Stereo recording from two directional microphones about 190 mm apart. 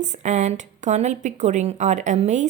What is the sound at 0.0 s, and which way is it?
A woman's voice, 40° right (ahead or behind).